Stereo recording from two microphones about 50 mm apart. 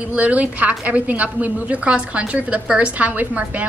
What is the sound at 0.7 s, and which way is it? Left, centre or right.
Speech, right.